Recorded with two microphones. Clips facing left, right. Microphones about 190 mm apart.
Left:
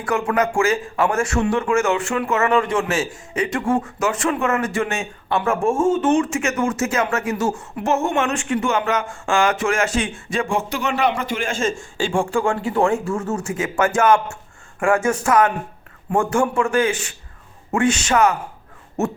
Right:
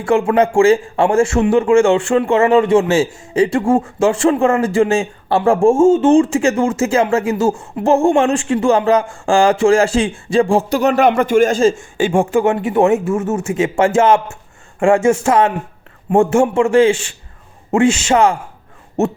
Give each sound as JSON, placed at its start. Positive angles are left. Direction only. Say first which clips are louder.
{"t": 0.0, "sound": "a man's voice", "louder": "right 7 dB", "side_deg": -25}
{"t": 11.9, "sound": "a man's voice", "louder": "right 6 dB", "side_deg": -20}